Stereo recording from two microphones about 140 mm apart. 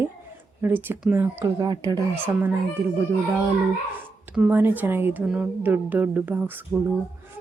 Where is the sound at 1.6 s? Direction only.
30° right (ahead or behind).